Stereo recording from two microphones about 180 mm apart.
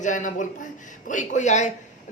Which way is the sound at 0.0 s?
45° left (ahead or behind).